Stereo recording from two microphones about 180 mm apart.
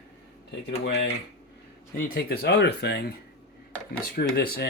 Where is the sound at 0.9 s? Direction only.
70° left (ahead or behind).